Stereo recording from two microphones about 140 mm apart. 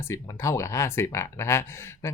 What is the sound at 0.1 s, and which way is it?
Speech, 20° left (ahead or behind).